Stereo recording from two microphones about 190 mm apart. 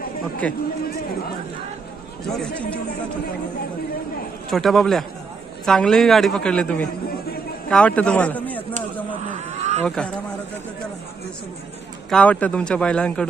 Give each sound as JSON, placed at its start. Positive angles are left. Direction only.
{"t": 4.4, "sound": "a woman's voice", "side_deg": 0}
{"t": 9.5, "sound": "a sound", "side_deg": -35}
{"t": 9.8, "sound": "a woman's voice", "side_deg": 5}
{"t": 12.1, "sound": "a woman's voice", "side_deg": 5}